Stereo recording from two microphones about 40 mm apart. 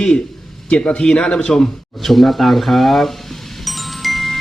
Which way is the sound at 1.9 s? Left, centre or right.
Centre.